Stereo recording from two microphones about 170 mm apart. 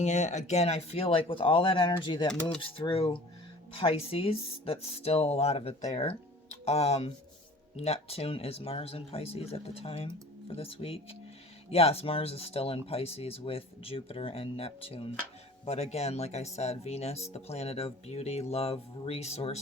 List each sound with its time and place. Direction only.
0.0 s speech: 45° left (ahead or behind)